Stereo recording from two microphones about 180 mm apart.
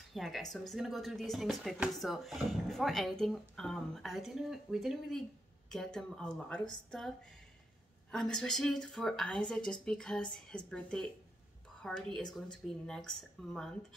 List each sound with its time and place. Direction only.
0.1 s speech: centre (ahead or behind)
8.1 s speech: 5° left (ahead or behind)